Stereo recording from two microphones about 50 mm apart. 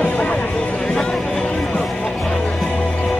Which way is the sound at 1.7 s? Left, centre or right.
Centre.